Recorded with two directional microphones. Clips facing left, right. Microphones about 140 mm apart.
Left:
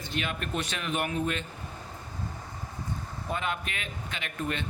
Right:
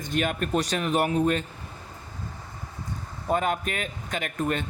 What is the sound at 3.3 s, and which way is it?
Speech, 45° right (ahead or behind).